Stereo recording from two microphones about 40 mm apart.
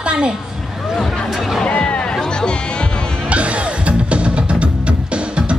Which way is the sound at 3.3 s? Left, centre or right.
Right.